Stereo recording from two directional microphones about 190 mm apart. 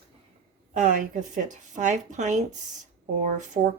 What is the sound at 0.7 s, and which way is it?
A woman's voice, 40° right (ahead or behind).